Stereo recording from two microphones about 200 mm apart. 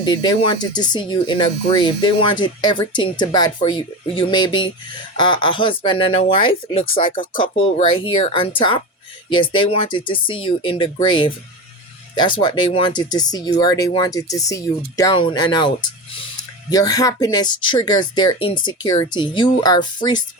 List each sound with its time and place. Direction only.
0.0 s speech: 20° left (ahead or behind)